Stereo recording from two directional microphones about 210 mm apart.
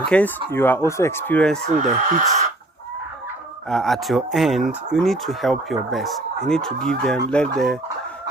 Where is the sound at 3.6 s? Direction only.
Centre (ahead or behind).